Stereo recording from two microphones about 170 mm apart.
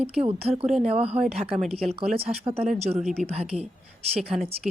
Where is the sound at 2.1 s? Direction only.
35° right (ahead or behind).